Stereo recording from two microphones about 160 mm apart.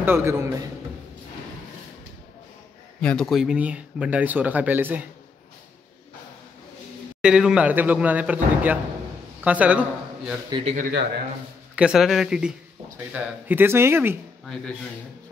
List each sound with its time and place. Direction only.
0.0 s speech: 15° right (ahead or behind)
3.0 s speech: 5° left (ahead or behind); by 5.0 s 10° right (ahead or behind)
7.2 s a man's voice: 5° right (ahead or behind)
10.8 s a man's voice: 90° right
11.7 s speech: 5° right (ahead or behind)
14.4 s speech: 5° left (ahead or behind)